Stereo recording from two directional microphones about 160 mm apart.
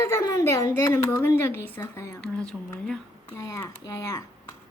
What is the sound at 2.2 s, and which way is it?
Speech, 5° left (ahead or behind).